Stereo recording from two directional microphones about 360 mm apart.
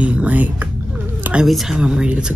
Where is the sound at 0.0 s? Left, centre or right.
Centre.